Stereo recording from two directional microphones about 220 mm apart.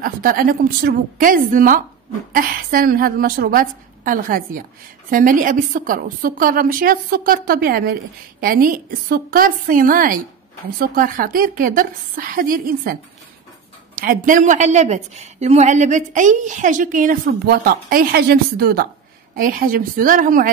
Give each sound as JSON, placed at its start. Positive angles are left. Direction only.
{"t": 0.0, "sound": "a woman's voice", "side_deg": -40}
{"t": 13.9, "sound": "a woman's voice", "side_deg": -40}